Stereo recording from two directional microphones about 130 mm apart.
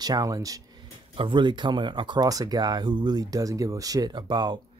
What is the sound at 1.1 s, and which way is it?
Speech, 40° right (ahead or behind).